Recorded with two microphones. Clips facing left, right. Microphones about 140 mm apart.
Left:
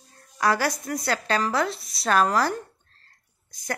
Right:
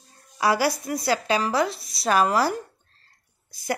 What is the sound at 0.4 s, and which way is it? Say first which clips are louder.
A woman's voice: right 2 dB; 5° right (ahead or behind).